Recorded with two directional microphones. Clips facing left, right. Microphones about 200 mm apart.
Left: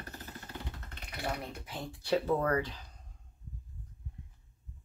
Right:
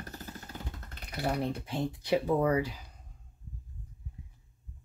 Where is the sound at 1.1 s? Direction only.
30° right (ahead or behind).